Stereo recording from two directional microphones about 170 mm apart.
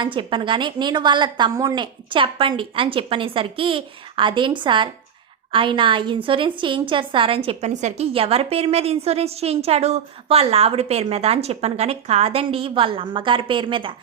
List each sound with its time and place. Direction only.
0.0 s a woman's voice: 30° right (ahead or behind)